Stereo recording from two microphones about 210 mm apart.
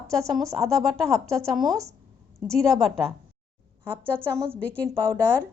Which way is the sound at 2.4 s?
Centre (ahead or behind).